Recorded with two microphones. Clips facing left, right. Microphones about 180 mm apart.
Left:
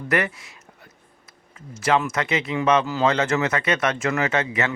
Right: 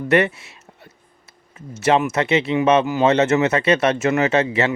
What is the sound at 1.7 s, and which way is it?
Speech, 25° right (ahead or behind).